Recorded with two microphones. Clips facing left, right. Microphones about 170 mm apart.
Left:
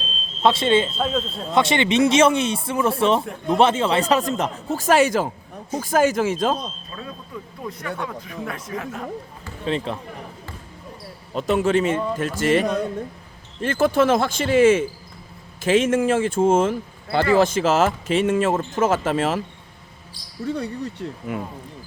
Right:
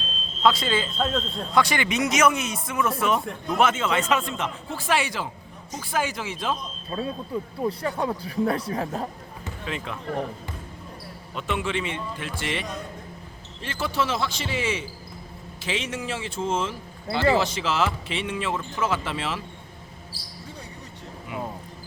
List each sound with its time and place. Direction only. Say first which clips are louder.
0.4 s speech: left 5 dB; 25° left (ahead or behind)
0.9 s a man's voice: left 2 dB; 5° left (ahead or behind)
1.5 s speech: left 5 dB; 25° left (ahead or behind); by 6.6 s 45° left (ahead or behind)
6.9 s speech: right 11 dB; 30° right (ahead or behind)
9.6 s speech: left 9 dB; 30° left (ahead or behind)
11.3 s speech: left 9 dB; 40° left (ahead or behind)
20.4 s speech: left 16 dB; 70° left (ahead or behind)